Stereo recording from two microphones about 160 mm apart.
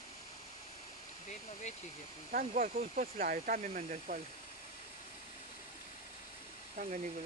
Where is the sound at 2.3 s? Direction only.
60° right (ahead or behind).